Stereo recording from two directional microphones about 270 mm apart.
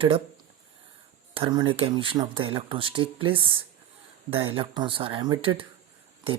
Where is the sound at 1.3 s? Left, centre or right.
Centre.